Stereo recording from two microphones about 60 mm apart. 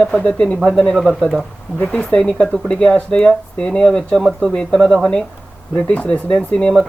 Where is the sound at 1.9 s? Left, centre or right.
Centre.